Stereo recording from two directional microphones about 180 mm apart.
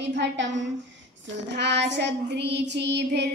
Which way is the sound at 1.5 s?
70° right (ahead or behind).